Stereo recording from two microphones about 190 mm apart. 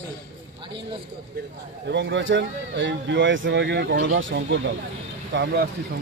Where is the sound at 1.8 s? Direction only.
70° right (ahead or behind).